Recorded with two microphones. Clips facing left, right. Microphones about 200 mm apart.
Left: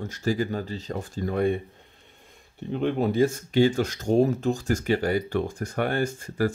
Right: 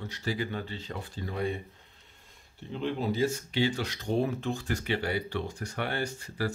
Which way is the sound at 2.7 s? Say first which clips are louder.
Left 6 dB; 55° left (ahead or behind).